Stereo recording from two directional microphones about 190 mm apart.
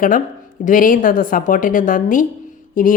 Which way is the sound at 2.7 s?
45° left (ahead or behind).